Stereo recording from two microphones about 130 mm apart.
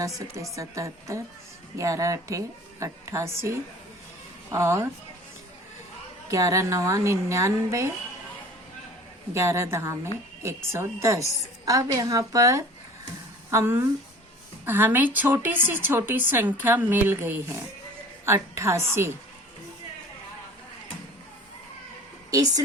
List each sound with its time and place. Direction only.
0.5 s a woman's voice: 25° right (ahead or behind)
6.3 s a woman's voice: 25° right (ahead or behind)
9.3 s a woman's voice: 20° right (ahead or behind)
22.3 s speech: 30° right (ahead or behind)